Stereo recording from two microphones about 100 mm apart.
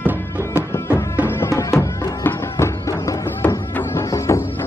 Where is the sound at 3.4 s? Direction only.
15° left (ahead or behind).